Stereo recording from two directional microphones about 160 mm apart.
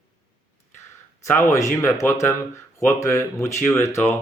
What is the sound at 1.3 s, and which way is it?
Speech, 15° left (ahead or behind).